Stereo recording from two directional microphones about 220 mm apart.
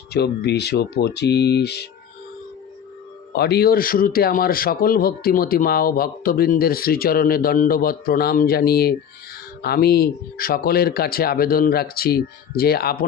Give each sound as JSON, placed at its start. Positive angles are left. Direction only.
{"t": 0.1, "sound": "speech", "side_deg": 50}
{"t": 3.3, "sound": "speech", "side_deg": 45}